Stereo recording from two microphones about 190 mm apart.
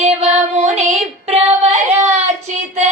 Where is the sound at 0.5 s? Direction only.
35° right (ahead or behind).